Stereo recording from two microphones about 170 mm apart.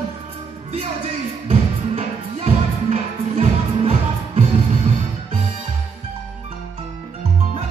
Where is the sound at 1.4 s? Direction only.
40° right (ahead or behind).